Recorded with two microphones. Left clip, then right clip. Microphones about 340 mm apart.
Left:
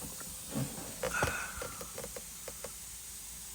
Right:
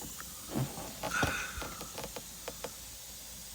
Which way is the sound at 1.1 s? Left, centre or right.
Centre.